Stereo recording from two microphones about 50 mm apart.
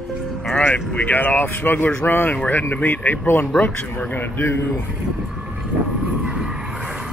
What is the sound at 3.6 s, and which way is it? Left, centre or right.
Speech, left.